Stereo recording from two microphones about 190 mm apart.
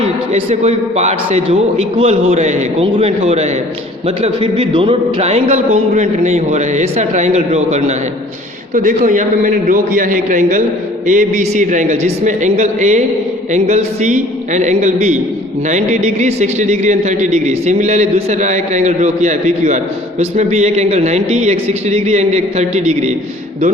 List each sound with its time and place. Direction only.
0.6 s a man's voice: 35° right (ahead or behind)